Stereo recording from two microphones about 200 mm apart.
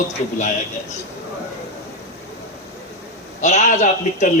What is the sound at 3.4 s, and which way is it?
Speech, 35° left (ahead or behind).